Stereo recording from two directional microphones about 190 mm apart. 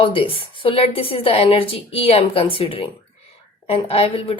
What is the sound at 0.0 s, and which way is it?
A woman's voice, 25° left (ahead or behind).